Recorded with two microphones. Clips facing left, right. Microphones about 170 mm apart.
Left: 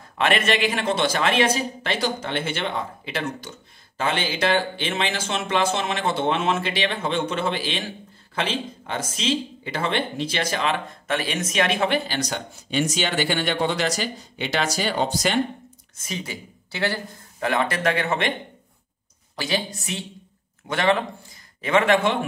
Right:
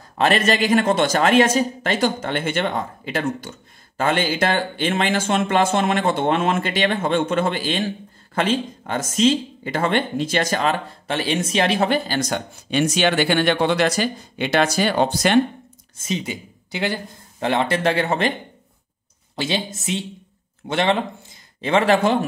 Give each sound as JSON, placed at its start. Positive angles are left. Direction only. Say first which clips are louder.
{"t": 0.2, "sound": "speech", "louder": "right 3 dB", "side_deg": -40}
{"t": 16.0, "sound": "speech", "louder": "right 6 dB", "side_deg": -20}
{"t": 19.3, "sound": "speech", "louder": "right 2 dB", "side_deg": -25}